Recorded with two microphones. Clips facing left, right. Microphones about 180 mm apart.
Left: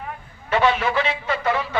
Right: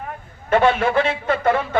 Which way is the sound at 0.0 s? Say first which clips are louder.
Right 2 dB; 50° right (ahead or behind).